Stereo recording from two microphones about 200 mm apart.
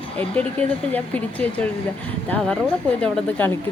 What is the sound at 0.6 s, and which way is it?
Speech, 5° left (ahead or behind).